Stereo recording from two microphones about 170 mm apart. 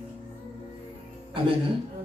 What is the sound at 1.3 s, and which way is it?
Speech, 30° right (ahead or behind).